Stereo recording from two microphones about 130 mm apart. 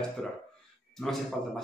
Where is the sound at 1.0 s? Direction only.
5° left (ahead or behind).